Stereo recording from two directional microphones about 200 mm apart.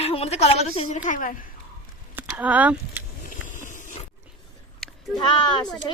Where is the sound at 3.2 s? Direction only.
40° left (ahead or behind).